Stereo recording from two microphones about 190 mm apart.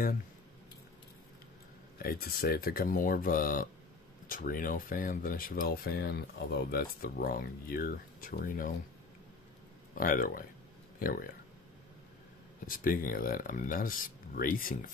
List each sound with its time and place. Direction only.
2.0 s speech: 50° left (ahead or behind)
9.9 s speech: 45° left (ahead or behind)
12.6 s speech: 45° left (ahead or behind)